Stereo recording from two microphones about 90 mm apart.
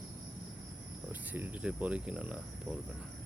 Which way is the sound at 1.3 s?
20° right (ahead or behind).